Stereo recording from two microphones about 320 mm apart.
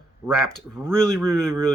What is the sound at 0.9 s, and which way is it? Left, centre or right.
Speech, centre.